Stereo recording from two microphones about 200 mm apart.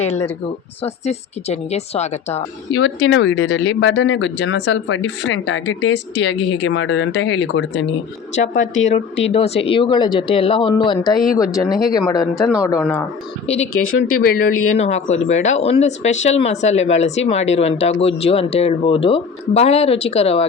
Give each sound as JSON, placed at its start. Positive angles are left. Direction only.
{"t": 0.8, "sound": "speech", "side_deg": 30}
{"t": 2.7, "sound": "speech", "side_deg": 70}
{"t": 8.5, "sound": "speech", "side_deg": 75}
{"t": 8.9, "sound": "speech", "side_deg": 30}
{"t": 13.7, "sound": "speech", "side_deg": 90}
{"t": 14.8, "sound": "speech", "side_deg": 35}